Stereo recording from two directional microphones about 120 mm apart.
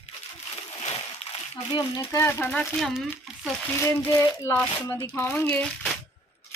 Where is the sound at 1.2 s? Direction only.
55° left (ahead or behind).